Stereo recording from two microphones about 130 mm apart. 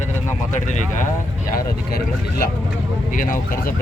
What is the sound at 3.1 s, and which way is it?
Speech, 90° left.